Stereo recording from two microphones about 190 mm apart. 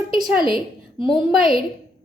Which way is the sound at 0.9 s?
25° left (ahead or behind).